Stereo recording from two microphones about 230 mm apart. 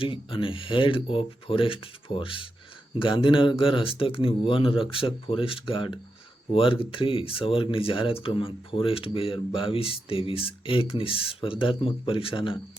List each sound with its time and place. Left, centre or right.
0.0 s speech: left